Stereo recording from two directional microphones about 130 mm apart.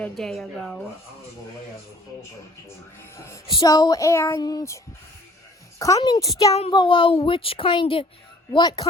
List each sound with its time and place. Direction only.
0.0 s a woman's voice: centre (ahead or behind)
3.5 s child singing: 30° left (ahead or behind)
5.8 s child singing: 25° left (ahead or behind)
6.7 s a man's voice: 40° left (ahead or behind)